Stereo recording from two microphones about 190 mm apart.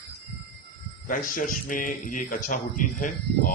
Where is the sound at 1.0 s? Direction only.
45° left (ahead or behind).